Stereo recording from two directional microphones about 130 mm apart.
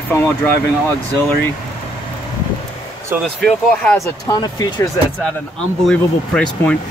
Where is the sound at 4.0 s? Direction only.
30° left (ahead or behind).